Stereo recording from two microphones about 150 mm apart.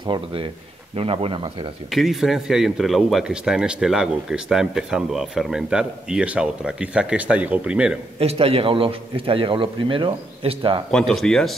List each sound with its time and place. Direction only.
0.0 s a man's voice: 35° right (ahead or behind)
1.9 s speech: centre (ahead or behind)
8.2 s a man's voice: 40° right (ahead or behind)
10.9 s speech: 5° left (ahead or behind)